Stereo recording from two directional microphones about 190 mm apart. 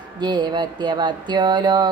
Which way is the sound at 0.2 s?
25° right (ahead or behind).